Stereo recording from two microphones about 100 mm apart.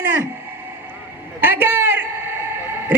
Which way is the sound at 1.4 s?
20° right (ahead or behind).